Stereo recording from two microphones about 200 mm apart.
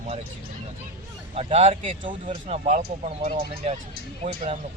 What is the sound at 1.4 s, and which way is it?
Speech, 30° right (ahead or behind).